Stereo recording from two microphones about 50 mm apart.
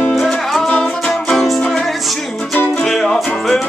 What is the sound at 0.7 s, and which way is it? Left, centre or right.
Music, left.